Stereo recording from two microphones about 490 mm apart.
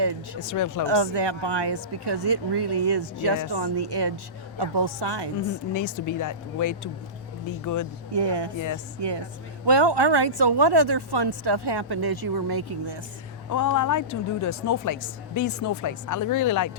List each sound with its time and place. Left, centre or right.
0.5 s speech: left
0.9 s a woman's voice: right
5.7 s speech: left
8.1 s a woman's voice: right
8.5 s speech: left
9.0 s a woman's voice: right
13.5 s speech: left